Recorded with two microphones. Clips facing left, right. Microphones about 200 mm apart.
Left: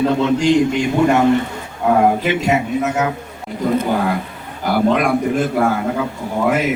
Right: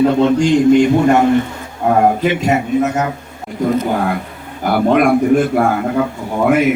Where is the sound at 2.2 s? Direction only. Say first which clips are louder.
Right 2 dB; 50° right (ahead or behind).